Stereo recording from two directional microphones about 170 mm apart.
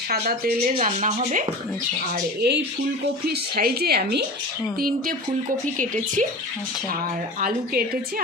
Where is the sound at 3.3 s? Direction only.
65° right (ahead or behind).